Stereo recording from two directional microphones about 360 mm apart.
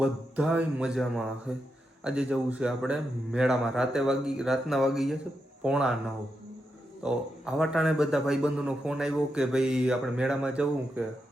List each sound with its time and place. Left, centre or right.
0.0 s a man's voice: centre
7.0 s a man's voice: centre